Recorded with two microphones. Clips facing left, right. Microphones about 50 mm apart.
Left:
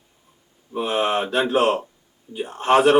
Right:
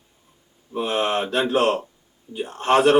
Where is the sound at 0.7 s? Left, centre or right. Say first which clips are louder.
Left 1 dB; centre.